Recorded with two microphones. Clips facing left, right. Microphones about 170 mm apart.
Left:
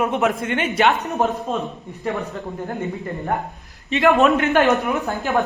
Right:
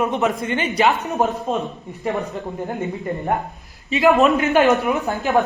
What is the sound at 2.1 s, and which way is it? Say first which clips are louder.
Speech: right 2 dB; 20° right (ahead or behind).